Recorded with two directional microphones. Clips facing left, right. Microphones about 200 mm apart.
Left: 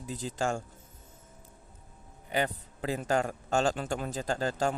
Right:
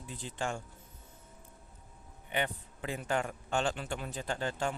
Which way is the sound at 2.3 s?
40° left (ahead or behind).